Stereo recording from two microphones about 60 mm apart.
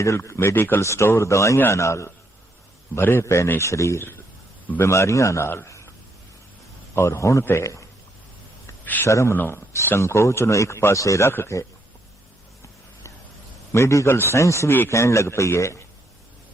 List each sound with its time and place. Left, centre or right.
0.0 s speech: left
0.5 s speech: left
0.8 s speech: left
2.9 s speech: left
5.6 s a sound: left
6.9 s a man's voice: left
8.8 s a sound: left
9.0 s speech: left
9.3 s speech: left
9.6 s speech: left
11.3 s speech: left
13.7 s speech: left